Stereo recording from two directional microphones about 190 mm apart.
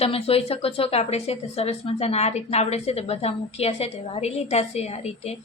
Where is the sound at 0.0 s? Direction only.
30° left (ahead or behind).